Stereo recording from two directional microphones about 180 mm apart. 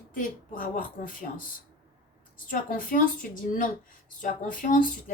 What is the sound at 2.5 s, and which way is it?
A woman's voice, 50° left (ahead or behind).